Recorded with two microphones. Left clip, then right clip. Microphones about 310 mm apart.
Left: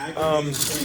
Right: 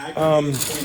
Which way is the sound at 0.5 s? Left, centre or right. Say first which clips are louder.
Even; centre.